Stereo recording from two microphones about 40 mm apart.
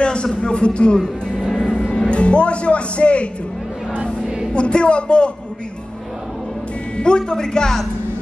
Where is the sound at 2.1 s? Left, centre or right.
Left.